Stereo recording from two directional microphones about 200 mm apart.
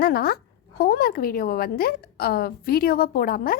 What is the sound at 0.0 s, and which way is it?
A woman's voice, 50° left (ahead or behind).